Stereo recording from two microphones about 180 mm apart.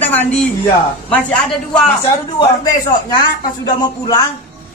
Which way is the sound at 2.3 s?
25° left (ahead or behind).